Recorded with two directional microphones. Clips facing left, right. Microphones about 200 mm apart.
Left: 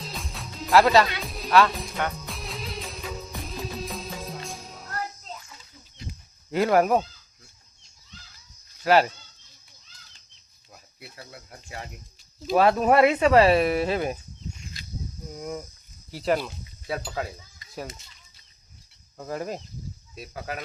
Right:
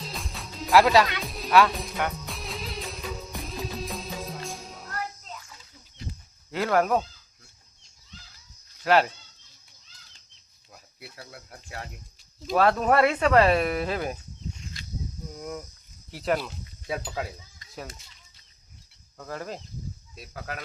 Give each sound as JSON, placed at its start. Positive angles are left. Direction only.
{"t": 0.0, "sound": "music", "side_deg": 0}
{"t": 6.1, "sound": "a sound", "side_deg": 15}
{"t": 8.8, "sound": "speech", "side_deg": 5}
{"t": 11.2, "sound": "speech", "side_deg": 0}
{"t": 15.3, "sound": "speech", "side_deg": 5}
{"t": 19.1, "sound": "speech", "side_deg": 20}
{"t": 20.1, "sound": "speech", "side_deg": 5}